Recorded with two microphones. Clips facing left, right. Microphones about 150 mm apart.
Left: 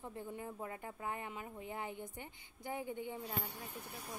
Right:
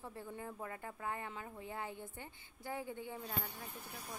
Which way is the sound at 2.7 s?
20° left (ahead or behind).